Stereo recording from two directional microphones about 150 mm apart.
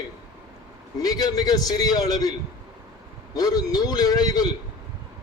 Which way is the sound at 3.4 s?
25° left (ahead or behind).